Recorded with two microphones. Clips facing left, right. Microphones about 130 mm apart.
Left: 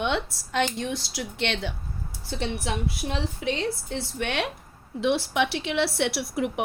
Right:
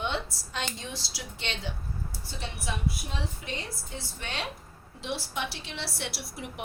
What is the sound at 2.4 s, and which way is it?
A woman's voice, 90° left.